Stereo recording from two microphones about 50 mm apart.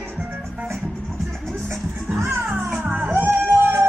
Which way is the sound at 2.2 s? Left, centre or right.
Right.